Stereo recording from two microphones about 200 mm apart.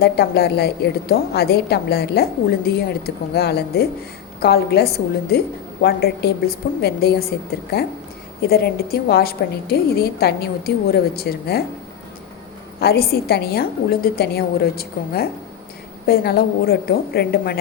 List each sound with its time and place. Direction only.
0.0 s a woman's voice: 55° left (ahead or behind)
12.8 s a woman's voice: 50° left (ahead or behind)